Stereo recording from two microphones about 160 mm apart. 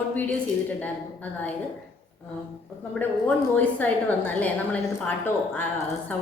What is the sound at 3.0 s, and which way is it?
A woman's voice, 10° left (ahead or behind).